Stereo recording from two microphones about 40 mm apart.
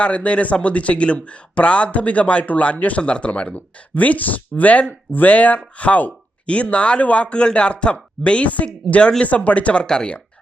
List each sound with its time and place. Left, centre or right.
0.0 s speech: left
3.0 s speech: left
6.4 s speech: left
9.8 s speech: centre